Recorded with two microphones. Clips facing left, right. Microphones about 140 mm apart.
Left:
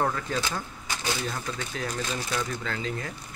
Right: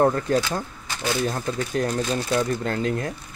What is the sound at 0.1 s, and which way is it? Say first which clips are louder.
Speech: right 7 dB; 50° right (ahead or behind).